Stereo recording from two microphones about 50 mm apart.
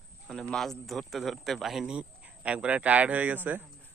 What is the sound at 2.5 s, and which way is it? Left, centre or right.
A man's voice, right.